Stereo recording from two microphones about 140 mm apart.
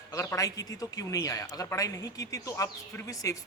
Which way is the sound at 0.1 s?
20° left (ahead or behind).